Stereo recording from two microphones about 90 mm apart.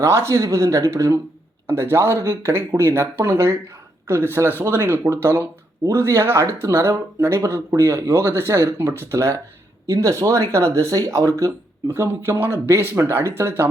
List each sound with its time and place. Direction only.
0.0 s speech: 30° right (ahead or behind)